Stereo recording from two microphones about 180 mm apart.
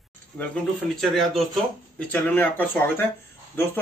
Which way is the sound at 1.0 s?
Centre (ahead or behind).